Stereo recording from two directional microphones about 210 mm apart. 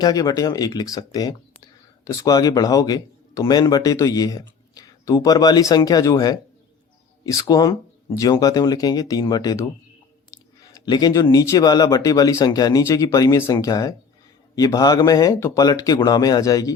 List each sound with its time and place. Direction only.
0.0 s speech: 15° left (ahead or behind)